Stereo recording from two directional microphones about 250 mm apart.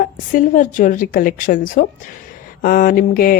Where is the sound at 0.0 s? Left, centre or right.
Left.